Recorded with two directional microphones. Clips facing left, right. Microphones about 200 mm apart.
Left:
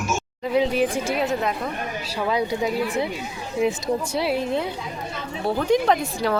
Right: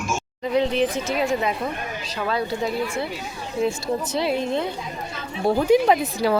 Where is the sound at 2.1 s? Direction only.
15° left (ahead or behind).